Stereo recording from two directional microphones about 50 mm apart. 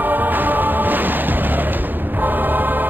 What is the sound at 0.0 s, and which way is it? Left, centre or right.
Music, right.